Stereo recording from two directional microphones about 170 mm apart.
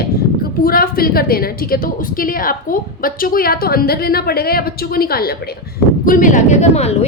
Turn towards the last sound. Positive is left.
turn(degrees=40)  # may be behind; listen again after turning